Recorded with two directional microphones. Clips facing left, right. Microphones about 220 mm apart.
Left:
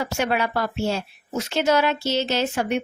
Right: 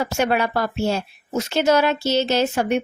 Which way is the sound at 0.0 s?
45° right (ahead or behind).